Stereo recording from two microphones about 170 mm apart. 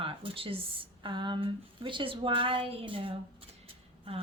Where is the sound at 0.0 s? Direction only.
30° right (ahead or behind).